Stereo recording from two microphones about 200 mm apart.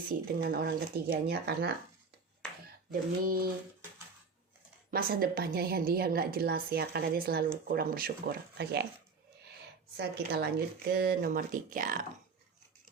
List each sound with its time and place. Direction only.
0.1 s a woman's voice: 50° right (ahead or behind)
2.9 s a woman's voice: 45° right (ahead or behind)
4.9 s a woman's voice: 45° right (ahead or behind)
10.0 s a woman's voice: 55° right (ahead or behind)